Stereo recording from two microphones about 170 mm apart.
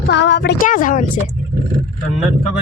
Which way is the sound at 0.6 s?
50° left (ahead or behind).